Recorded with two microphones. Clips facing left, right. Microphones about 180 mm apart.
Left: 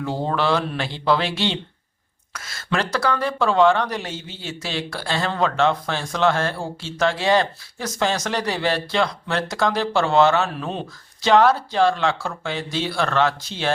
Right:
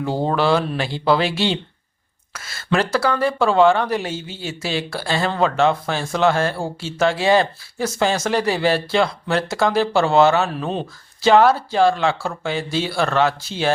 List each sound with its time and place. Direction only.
0.3 s speech: 5° right (ahead or behind)